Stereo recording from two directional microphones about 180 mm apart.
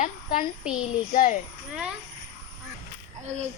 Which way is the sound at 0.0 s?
50° left (ahead or behind).